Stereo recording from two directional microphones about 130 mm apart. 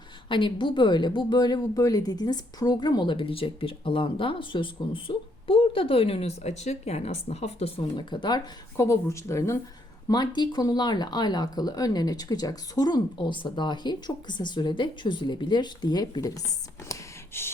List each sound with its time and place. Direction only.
0.3 s speech: 40° left (ahead or behind)
7.8 s speech: 35° left (ahead or behind)
8.7 s speech: 20° left (ahead or behind)
10.1 s speech: 35° left (ahead or behind)
16.9 s a sound: 20° left (ahead or behind)